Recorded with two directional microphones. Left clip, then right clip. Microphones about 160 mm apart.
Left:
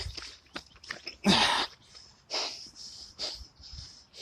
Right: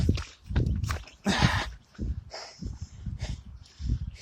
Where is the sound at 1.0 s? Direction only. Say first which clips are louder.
Left 3 dB; 50° left (ahead or behind).